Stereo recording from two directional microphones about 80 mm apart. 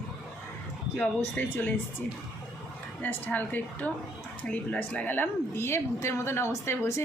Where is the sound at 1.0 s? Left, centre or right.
Centre.